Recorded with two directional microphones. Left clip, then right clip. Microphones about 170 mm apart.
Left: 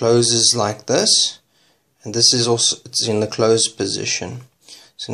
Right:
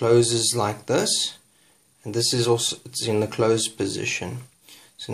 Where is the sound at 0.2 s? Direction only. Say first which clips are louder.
Left 6 dB; 5° left (ahead or behind).